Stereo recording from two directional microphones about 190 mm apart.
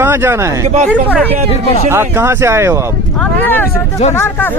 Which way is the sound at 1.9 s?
15° right (ahead or behind).